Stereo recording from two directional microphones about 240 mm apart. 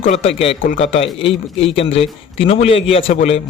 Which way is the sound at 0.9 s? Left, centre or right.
Left.